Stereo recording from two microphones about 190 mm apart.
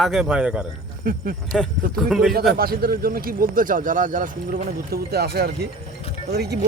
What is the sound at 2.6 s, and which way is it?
Speech, 50° right (ahead or behind).